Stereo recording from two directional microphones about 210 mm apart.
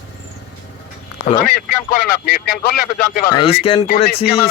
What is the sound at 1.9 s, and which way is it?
Speech, 45° left (ahead or behind).